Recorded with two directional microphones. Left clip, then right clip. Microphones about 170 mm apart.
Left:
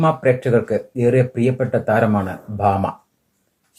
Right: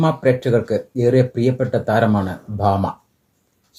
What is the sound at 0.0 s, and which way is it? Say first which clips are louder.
Speech: left 1 dB; 25° right (ahead or behind).